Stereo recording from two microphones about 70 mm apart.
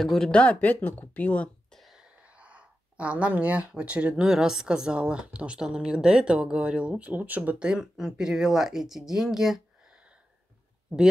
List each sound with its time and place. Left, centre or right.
0.0 s speech: centre
0.3 s speech: centre
1.7 s a sound: centre
2.2 s speech: centre